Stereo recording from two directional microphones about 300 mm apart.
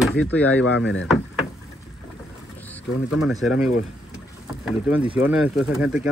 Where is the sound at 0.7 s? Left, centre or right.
Left.